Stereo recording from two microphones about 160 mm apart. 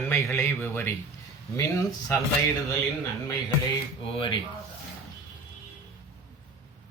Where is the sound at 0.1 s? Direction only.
15° left (ahead or behind).